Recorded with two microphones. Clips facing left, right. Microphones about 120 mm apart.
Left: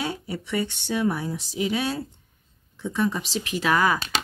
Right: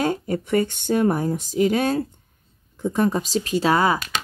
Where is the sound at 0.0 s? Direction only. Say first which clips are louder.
Right 7 dB; 45° right (ahead or behind).